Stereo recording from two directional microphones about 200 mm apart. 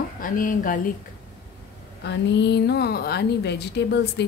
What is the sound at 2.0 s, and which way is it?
A woman's voice, 60° left (ahead or behind).